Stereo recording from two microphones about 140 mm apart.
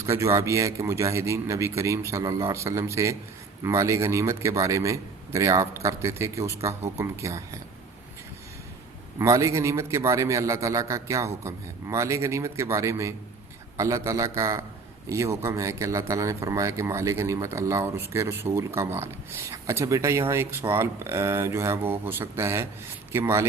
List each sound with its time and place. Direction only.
0.0 s a man's voice: 20° right (ahead or behind)
9.1 s a man's voice: 20° right (ahead or behind)